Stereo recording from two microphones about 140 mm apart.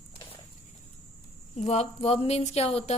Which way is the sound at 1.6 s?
50° left (ahead or behind).